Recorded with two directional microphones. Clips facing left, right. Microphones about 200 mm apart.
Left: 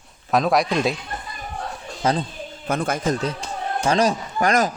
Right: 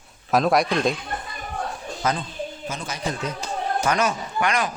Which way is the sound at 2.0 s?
30° left (ahead or behind).